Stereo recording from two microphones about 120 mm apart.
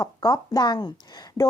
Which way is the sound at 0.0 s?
35° left (ahead or behind).